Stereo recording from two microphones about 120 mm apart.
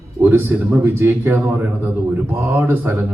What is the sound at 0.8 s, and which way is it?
Speech, 20° right (ahead or behind).